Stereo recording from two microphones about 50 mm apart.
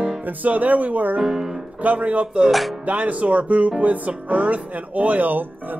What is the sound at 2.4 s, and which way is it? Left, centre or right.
Music, centre.